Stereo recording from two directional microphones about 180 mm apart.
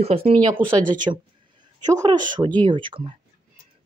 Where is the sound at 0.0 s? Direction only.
30° right (ahead or behind).